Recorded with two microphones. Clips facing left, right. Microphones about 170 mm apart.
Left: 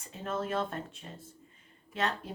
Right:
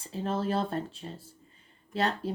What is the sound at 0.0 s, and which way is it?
A woman's voice, 30° right (ahead or behind).